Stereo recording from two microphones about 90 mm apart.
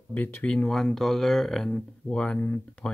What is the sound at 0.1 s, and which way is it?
Speech, 20° left (ahead or behind).